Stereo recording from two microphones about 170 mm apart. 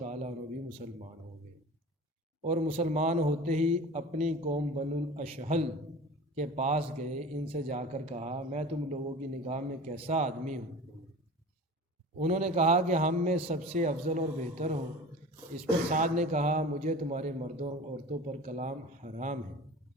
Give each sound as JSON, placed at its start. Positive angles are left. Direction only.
{"t": 0.0, "sound": "a sound", "side_deg": -40}
{"t": 0.8, "sound": "a man's voice", "side_deg": -45}
{"t": 2.4, "sound": "a man's voice", "side_deg": -40}
{"t": 12.2, "sound": "a man's voice", "side_deg": -45}
{"t": 15.9, "sound": "a man's voice", "side_deg": -45}